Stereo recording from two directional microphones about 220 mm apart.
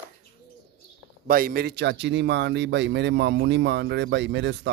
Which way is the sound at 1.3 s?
40° right (ahead or behind).